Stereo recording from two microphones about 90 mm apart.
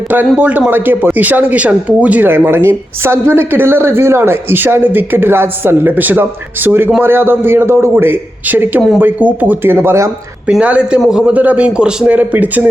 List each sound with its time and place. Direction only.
0.3 s speech: 20° right (ahead or behind)
10.6 s a man's voice: 15° right (ahead or behind)